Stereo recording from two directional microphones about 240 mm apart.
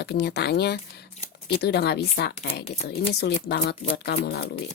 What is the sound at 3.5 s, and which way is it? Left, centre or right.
A woman's voice, left.